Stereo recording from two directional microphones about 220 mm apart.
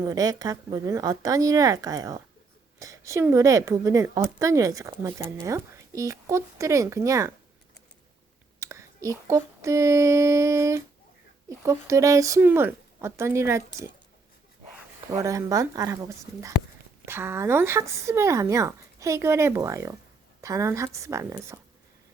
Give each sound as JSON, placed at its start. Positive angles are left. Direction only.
{"t": 0.0, "sound": "a woman's voice", "side_deg": -15}
{"t": 8.6, "sound": "a woman's voice", "side_deg": -15}
{"t": 15.1, "sound": "a woman's voice", "side_deg": -15}